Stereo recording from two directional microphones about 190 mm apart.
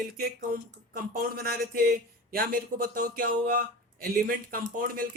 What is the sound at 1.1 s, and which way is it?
Speech, 50° right (ahead or behind).